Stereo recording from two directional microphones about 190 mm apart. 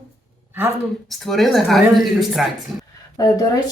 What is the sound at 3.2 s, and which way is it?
Speech, 20° left (ahead or behind).